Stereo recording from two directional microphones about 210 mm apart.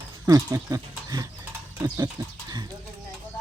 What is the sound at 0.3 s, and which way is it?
Speech, 15° right (ahead or behind).